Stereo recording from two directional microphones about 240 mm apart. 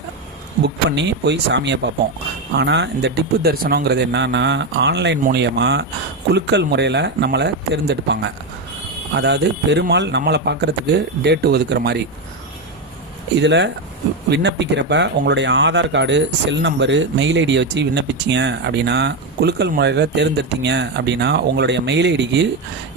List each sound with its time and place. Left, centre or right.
0.6 s speech: right
13.4 s speech: right